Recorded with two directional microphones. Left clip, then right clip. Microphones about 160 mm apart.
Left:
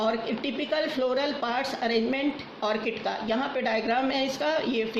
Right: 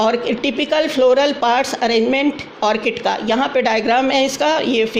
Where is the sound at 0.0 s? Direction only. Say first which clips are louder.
Right 11 dB; 60° right (ahead or behind).